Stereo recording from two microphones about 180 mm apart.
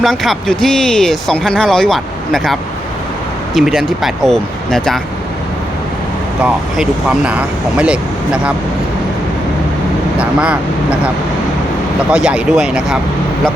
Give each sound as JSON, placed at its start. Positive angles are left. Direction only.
{"t": 0.0, "sound": "speech", "side_deg": 0}
{"t": 6.4, "sound": "speech", "side_deg": -5}
{"t": 10.2, "sound": "speech", "side_deg": -5}
{"t": 12.1, "sound": "speech", "side_deg": -5}